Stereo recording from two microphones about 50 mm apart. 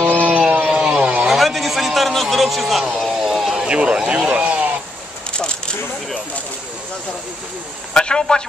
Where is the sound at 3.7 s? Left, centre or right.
Right.